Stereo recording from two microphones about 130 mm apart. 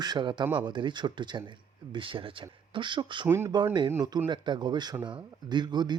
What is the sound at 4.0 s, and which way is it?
Speech, 30° right (ahead or behind).